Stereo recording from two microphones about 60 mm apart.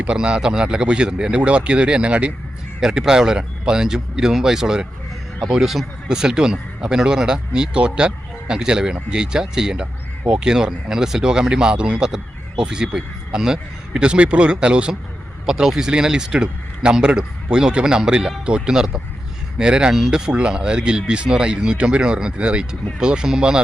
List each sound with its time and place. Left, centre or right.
0.0 s speech: centre
2.8 s speech: centre
6.1 s speech: centre